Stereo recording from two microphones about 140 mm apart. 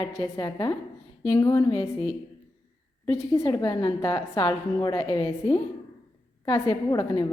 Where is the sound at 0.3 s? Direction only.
25° left (ahead or behind).